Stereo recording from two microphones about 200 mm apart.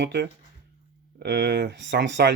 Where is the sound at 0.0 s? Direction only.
55° right (ahead or behind).